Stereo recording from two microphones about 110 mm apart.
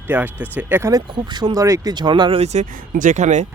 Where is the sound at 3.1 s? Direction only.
90° right.